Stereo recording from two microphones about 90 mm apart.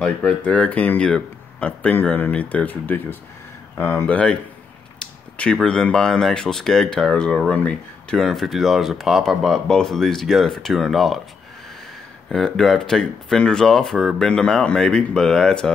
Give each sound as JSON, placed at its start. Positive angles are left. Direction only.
{"t": 0.0, "sound": "speech", "side_deg": 10}
{"t": 4.1, "sound": "speech", "side_deg": 15}
{"t": 8.2, "sound": "speech", "side_deg": 0}
{"t": 12.3, "sound": "speech", "side_deg": 5}